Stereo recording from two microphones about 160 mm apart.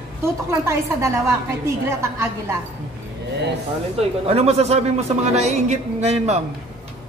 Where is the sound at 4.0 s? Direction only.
40° right (ahead or behind).